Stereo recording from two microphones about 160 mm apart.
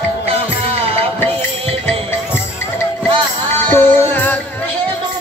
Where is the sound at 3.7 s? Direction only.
15° left (ahead or behind).